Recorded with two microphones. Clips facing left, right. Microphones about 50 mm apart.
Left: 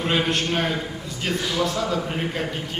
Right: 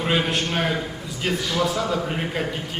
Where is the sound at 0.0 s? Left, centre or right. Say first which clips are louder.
Even; centre.